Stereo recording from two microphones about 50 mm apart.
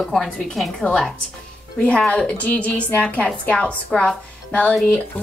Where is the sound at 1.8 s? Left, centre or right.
Left.